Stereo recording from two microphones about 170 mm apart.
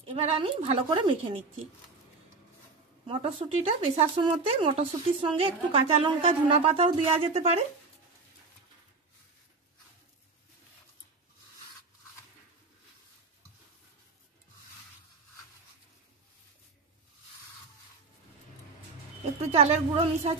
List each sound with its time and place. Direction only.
0.0 s speech: 35° right (ahead or behind)
3.1 s speech: 35° right (ahead or behind)
19.5 s speech: 40° right (ahead or behind)